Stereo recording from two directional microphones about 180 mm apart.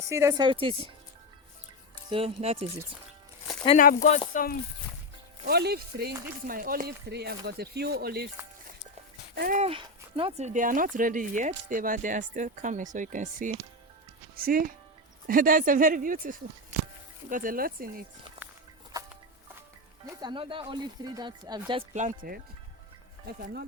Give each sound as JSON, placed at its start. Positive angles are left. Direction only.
{"t": 0.1, "sound": "speech", "side_deg": -15}
{"t": 2.0, "sound": "speech", "side_deg": -30}
{"t": 3.8, "sound": "speech", "side_deg": 45}
{"t": 5.5, "sound": "speech", "side_deg": -65}
{"t": 9.3, "sound": "speech", "side_deg": -60}
{"t": 9.6, "sound": "speech", "side_deg": -30}
{"t": 18.4, "sound": "walk", "side_deg": -10}
{"t": 20.2, "sound": "speech", "side_deg": -30}
{"t": 21.9, "sound": "speech", "side_deg": -45}